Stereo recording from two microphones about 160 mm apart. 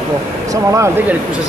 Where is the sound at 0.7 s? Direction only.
20° right (ahead or behind).